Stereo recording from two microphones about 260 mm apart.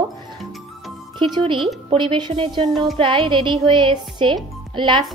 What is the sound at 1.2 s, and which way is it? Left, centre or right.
A woman's voice, centre.